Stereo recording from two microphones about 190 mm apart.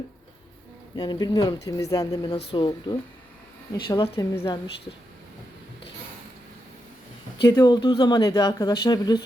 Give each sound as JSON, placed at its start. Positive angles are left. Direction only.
{"t": 0.9, "sound": "a woman's voice", "side_deg": 25}
{"t": 7.4, "sound": "speech", "side_deg": 20}